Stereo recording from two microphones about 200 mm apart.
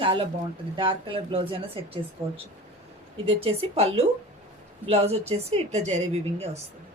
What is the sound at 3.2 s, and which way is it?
A woman's voice, 30° right (ahead or behind).